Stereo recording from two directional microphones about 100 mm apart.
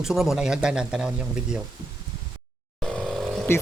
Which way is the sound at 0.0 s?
5° right (ahead or behind).